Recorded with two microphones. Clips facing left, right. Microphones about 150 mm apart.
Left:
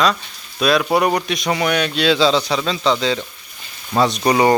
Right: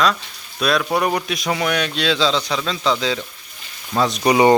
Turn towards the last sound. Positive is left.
turn(degrees=-15)  # may be behind; listen again after turning